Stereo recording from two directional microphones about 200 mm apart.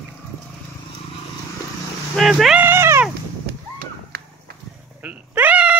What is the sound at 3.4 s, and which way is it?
Horse, 50° right (ahead or behind).